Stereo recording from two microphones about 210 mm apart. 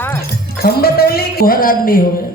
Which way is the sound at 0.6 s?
45° left (ahead or behind).